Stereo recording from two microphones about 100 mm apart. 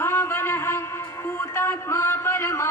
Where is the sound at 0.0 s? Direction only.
25° left (ahead or behind).